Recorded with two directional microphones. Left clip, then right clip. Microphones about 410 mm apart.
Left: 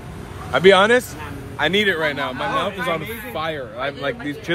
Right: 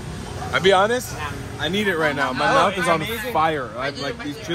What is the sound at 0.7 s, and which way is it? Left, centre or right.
Speech, centre.